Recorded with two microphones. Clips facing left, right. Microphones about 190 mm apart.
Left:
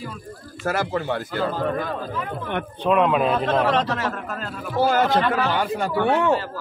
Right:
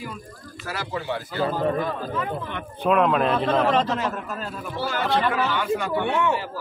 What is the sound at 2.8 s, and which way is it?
A man's voice, centre (ahead or behind).